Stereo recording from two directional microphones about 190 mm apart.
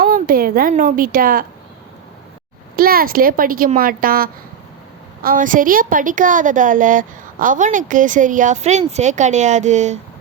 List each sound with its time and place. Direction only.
0.0 s a woman's voice: 50° right (ahead or behind)
2.7 s a woman's voice: 50° right (ahead or behind)